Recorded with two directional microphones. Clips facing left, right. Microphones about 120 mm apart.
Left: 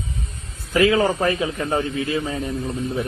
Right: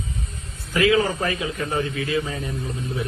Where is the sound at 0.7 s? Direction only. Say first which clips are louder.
Left 2 dB; 30° left (ahead or behind).